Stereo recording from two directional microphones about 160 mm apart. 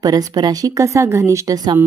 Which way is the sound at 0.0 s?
25° right (ahead or behind).